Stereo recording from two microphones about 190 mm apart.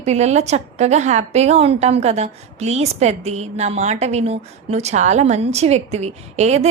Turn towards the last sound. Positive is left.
turn(degrees=-35)  # may be behind; listen again after turning